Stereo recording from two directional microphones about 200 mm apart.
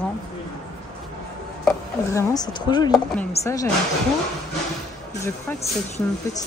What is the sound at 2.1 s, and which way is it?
Speech, 20° left (ahead or behind).